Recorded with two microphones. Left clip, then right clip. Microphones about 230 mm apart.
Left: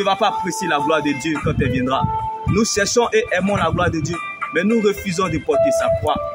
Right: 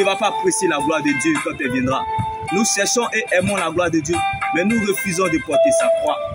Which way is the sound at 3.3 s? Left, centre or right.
Left.